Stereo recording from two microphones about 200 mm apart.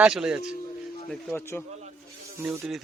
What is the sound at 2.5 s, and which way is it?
Speech, centre (ahead or behind).